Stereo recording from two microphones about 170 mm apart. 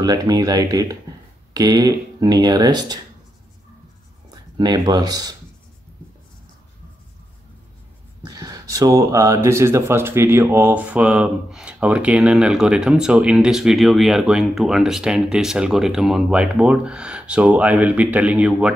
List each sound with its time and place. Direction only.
0.0 s speech: 20° right (ahead or behind)
4.6 s speech: 25° right (ahead or behind)
8.3 s speech: 20° right (ahead or behind)